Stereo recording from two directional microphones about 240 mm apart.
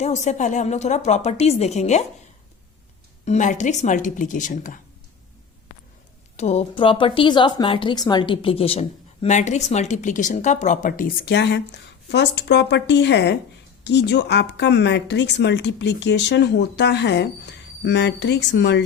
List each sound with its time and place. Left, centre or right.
0.0 s speech: left
3.2 s speech: left
6.3 s speech: left